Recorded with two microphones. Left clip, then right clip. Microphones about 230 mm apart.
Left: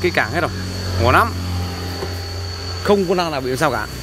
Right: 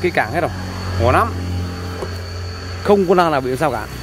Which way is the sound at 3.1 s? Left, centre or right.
Centre.